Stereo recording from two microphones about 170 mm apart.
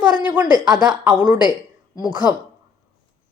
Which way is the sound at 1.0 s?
10° right (ahead or behind).